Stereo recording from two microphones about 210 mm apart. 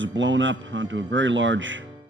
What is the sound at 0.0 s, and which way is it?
A man's voice, 60° right (ahead or behind).